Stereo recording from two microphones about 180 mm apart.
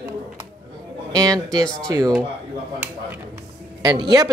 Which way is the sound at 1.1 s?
20° right (ahead or behind).